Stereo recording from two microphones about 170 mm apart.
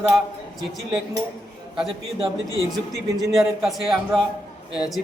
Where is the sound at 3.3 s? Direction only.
Centre (ahead or behind).